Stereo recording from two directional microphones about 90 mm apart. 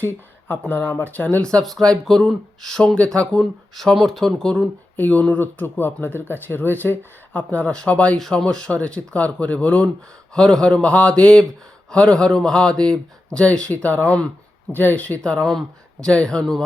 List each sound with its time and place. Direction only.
0.0 s speech: 20° left (ahead or behind); by 4.7 s 5° left (ahead or behind)
4.9 s speech: 15° left (ahead or behind)